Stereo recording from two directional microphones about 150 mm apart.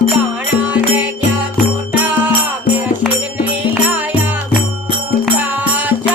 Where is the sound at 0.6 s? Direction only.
10° right (ahead or behind).